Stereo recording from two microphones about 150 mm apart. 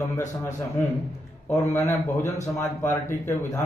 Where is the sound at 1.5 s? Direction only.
15° left (ahead or behind).